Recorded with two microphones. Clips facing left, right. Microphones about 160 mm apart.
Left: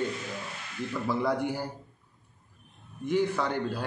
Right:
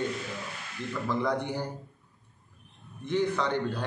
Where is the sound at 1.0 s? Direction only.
10° left (ahead or behind).